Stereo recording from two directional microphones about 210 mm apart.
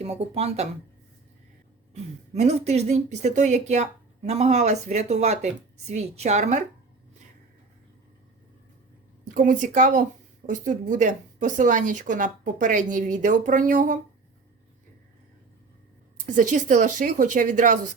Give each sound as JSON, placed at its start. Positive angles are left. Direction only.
{"t": 0.0, "sound": "speech", "side_deg": -30}
{"t": 2.3, "sound": "speech", "side_deg": -30}
{"t": 9.3, "sound": "speech", "side_deg": -40}
{"t": 16.1, "sound": "speech", "side_deg": -40}